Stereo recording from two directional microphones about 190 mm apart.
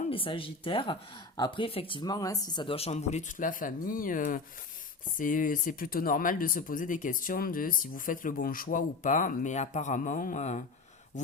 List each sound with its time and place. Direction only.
0.0 s speech: 30° left (ahead or behind)